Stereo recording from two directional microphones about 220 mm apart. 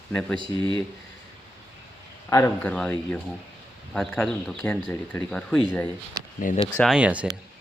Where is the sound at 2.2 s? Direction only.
15° left (ahead or behind).